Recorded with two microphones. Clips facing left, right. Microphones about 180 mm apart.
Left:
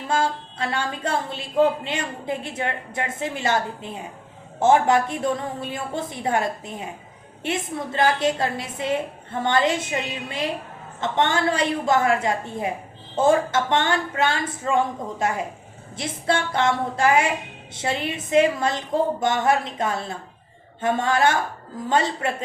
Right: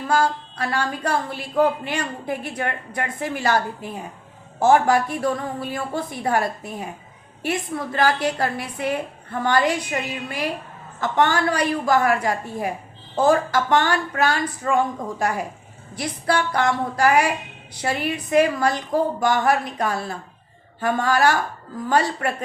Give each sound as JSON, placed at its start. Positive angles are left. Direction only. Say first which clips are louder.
{"t": 0.1, "sound": "a woman's voice", "louder": "right 2 dB", "side_deg": 25}
{"t": 16.0, "sound": "a woman's voice", "louder": "right 1 dB", "side_deg": 25}